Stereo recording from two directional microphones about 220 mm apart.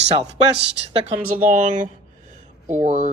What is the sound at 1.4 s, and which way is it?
Speech, 35° right (ahead or behind).